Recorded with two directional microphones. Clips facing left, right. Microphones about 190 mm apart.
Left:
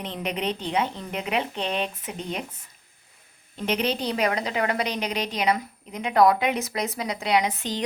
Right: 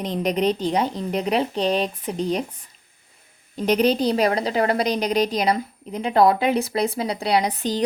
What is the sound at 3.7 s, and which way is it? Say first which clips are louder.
A woman's voice: right 7 dB; 40° right (ahead or behind).